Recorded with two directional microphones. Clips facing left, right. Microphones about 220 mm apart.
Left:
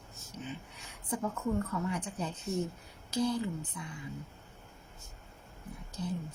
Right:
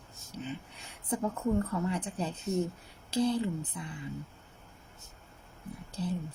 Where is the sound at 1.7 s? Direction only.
30° right (ahead or behind).